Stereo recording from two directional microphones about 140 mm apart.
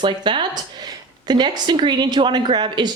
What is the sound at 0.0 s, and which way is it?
Speech, 35° right (ahead or behind).